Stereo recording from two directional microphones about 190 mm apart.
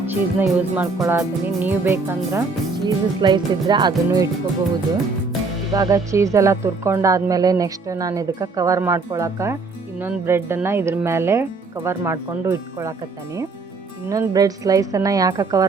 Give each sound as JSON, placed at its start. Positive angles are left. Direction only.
{"t": 0.0, "sound": "speech", "side_deg": -10}
{"t": 2.8, "sound": "a woman's voice", "side_deg": -25}
{"t": 5.7, "sound": "speech", "side_deg": -20}
{"t": 14.1, "sound": "a woman's voice", "side_deg": -20}